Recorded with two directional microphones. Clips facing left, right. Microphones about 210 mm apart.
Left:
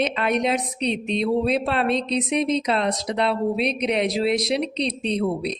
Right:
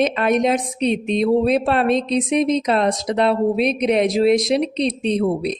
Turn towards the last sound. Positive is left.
turn(degrees=-50)  # may be behind; listen again after turning